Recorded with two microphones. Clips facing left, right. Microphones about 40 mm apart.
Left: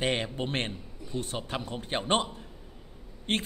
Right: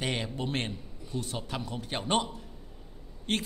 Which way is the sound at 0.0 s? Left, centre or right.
Left.